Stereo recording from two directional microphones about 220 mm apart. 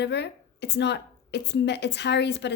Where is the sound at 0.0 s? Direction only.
50° left (ahead or behind).